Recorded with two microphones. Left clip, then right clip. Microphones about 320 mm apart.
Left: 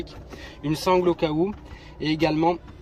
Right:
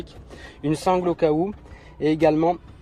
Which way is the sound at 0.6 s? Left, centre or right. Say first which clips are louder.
Even; right.